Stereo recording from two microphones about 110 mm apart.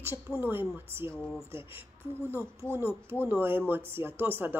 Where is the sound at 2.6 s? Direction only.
20° right (ahead or behind).